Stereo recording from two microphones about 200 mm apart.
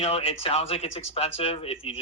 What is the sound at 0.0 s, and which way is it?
Speech, 30° left (ahead or behind).